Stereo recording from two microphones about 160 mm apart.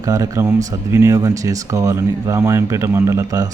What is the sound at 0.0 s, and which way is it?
Speech, 20° right (ahead or behind).